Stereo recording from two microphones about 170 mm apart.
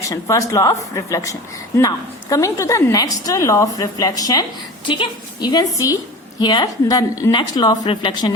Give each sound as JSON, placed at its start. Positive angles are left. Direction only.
{"t": 0.0, "sound": "speech", "side_deg": 20}